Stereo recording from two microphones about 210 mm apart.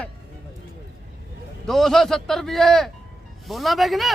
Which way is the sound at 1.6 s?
Centre (ahead or behind).